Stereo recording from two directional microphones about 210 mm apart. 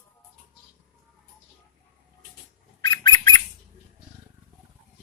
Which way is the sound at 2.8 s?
20° left (ahead or behind).